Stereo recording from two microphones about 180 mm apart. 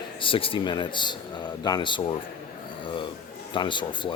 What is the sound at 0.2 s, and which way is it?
Speech, 30° left (ahead or behind).